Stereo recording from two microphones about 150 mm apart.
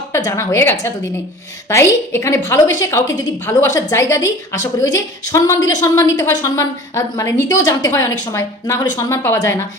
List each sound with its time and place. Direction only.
0.1 s a woman's voice: 20° left (ahead or behind)